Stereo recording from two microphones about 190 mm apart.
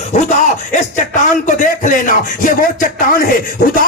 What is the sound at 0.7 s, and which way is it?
Speech, 40° left (ahead or behind).